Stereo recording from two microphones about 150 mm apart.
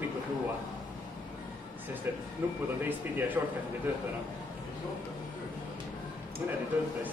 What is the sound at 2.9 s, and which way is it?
Speech, 10° right (ahead or behind).